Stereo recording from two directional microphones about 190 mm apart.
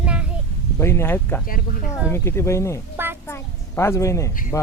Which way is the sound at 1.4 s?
50° left (ahead or behind).